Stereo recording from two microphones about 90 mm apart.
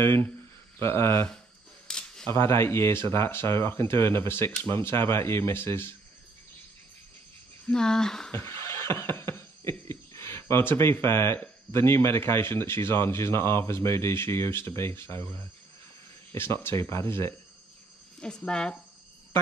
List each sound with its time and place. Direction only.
0.0 s speech: 30° left (ahead or behind)
1.9 s camera: 5° left (ahead or behind)
2.3 s speech: 30° left (ahead or behind)
7.6 s speech: 10° left (ahead or behind)
8.3 s beatboxing: 30° left (ahead or behind)
16.3 s speech: 25° left (ahead or behind)
18.2 s speech: 10° left (ahead or behind)